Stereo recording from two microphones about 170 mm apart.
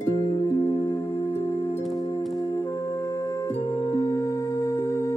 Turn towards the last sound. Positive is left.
turn(degrees=20)  # may be behind; listen again after turning